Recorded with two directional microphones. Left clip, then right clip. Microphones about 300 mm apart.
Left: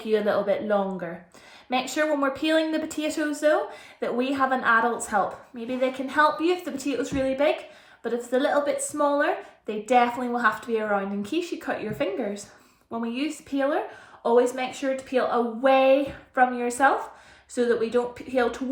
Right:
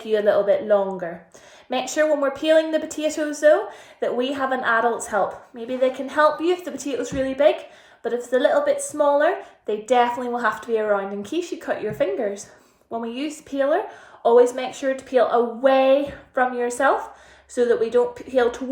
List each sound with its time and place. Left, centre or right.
0.1 s a woman's voice: centre